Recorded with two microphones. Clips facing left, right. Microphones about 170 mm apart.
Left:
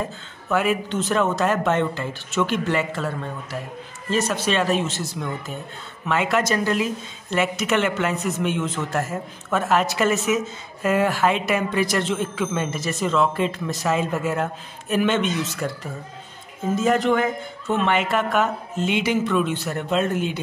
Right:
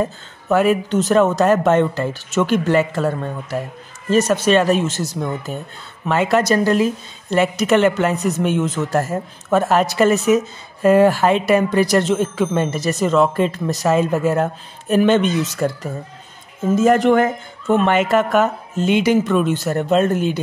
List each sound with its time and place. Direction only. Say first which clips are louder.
0.5 s a woman's voice: right 6 dB; 40° right (ahead or behind)
16.7 s a woman's voice: right 6 dB; 50° right (ahead or behind)